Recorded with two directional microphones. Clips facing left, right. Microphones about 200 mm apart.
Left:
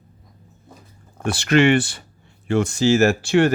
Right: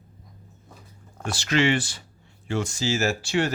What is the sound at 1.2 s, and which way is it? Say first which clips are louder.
Speech: left 7 dB; 60° left (ahead or behind).